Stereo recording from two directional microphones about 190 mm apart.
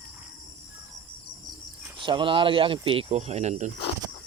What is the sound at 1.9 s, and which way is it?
Speech, 25° right (ahead or behind).